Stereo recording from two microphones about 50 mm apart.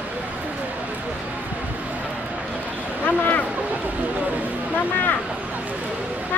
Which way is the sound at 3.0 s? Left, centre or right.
Left.